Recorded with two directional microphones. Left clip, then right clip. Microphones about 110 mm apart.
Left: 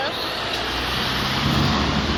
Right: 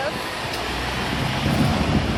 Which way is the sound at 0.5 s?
10° left (ahead or behind).